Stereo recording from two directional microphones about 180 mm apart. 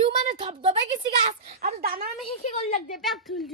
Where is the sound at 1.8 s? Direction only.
55° right (ahead or behind).